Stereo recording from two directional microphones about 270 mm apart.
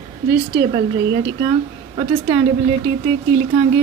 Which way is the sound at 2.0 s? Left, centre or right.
Right.